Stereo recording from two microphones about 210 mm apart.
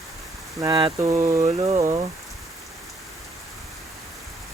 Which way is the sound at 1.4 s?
30° right (ahead or behind).